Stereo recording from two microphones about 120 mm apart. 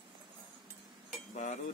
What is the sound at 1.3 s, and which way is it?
Cutlery, 90° left.